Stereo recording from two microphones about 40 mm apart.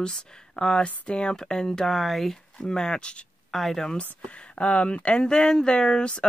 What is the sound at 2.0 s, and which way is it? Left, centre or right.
Speech, centre.